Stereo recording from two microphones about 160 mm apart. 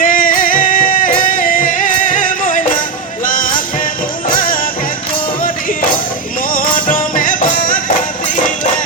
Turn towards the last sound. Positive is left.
turn(degrees=60)  # may be behind; listen again after turning